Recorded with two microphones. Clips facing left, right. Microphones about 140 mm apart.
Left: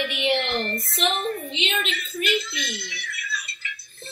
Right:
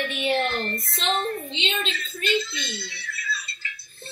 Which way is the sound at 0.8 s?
25° right (ahead or behind).